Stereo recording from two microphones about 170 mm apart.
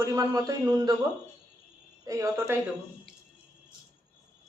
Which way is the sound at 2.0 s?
15° right (ahead or behind).